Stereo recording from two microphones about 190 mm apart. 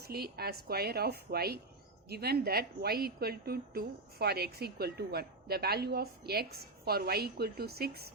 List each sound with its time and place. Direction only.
0.0 s a woman's voice: 55° right (ahead or behind)